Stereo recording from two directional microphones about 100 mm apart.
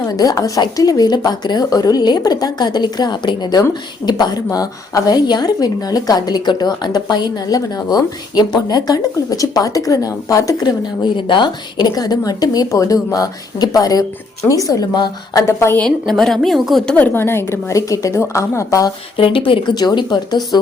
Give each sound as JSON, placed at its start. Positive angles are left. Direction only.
{"t": 0.1, "sound": "speech", "side_deg": 35}
{"t": 15.5, "sound": "a woman's voice", "side_deg": 25}
{"t": 15.8, "sound": "a woman's voice", "side_deg": 5}
{"t": 16.9, "sound": "a woman's voice", "side_deg": 20}
{"t": 19.1, "sound": "speech", "side_deg": 60}
{"t": 19.7, "sound": "speech", "side_deg": 45}